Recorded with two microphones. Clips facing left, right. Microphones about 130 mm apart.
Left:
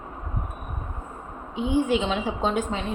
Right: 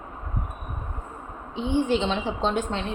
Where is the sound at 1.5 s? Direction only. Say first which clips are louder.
Left 1 dB; 5° left (ahead or behind).